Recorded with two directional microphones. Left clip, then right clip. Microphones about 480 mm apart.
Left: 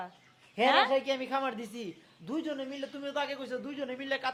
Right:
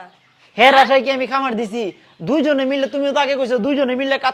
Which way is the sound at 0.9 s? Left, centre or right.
Right.